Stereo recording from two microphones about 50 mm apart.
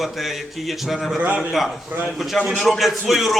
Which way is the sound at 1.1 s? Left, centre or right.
Right.